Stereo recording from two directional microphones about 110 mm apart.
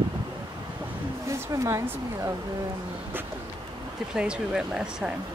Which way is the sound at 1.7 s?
25° right (ahead or behind).